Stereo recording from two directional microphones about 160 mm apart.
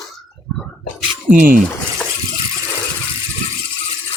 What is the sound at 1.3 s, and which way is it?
Speech, 60° right (ahead or behind).